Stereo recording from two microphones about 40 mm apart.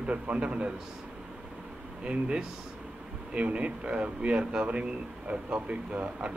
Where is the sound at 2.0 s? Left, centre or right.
Right.